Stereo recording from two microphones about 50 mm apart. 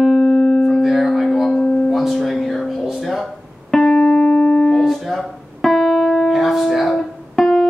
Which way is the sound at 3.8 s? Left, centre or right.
Centre.